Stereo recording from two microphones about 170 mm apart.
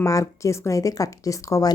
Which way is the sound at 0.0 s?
20° left (ahead or behind).